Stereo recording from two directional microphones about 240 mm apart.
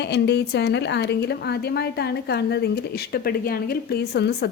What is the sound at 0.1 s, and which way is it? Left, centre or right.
A woman's voice, left.